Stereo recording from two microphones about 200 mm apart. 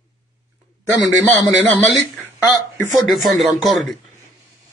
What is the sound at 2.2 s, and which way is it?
Speech, 15° left (ahead or behind).